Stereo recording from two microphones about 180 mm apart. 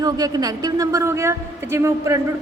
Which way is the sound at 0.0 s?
20° right (ahead or behind).